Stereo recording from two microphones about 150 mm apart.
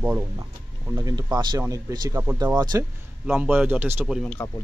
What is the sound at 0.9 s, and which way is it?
Speech, 25° right (ahead or behind).